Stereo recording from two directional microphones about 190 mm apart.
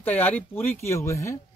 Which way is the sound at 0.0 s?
10° left (ahead or behind).